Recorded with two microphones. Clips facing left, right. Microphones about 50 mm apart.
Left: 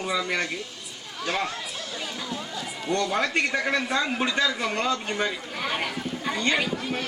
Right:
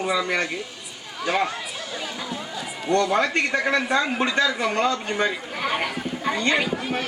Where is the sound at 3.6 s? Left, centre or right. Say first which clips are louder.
Right 4 dB; centre.